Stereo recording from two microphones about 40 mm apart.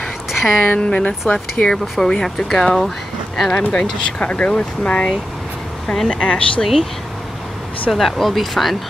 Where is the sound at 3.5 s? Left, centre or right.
Left.